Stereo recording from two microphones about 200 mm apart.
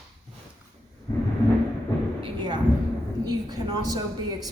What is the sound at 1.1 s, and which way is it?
Timpani, 20° left (ahead or behind).